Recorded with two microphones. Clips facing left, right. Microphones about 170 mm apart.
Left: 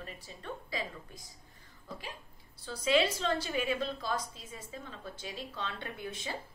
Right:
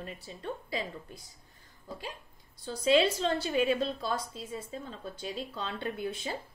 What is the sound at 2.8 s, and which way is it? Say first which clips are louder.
A woman's voice: right 3 dB; 30° right (ahead or behind).